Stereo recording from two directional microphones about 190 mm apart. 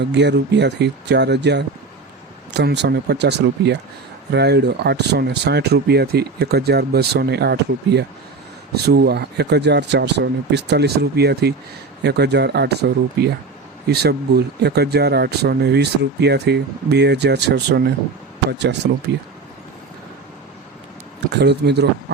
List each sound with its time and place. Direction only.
0.0 s speech: 65° right (ahead or behind)
18.8 s speech: 65° right (ahead or behind)
21.2 s speech: 60° right (ahead or behind)